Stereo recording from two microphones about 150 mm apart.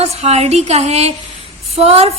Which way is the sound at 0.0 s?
45° right (ahead or behind).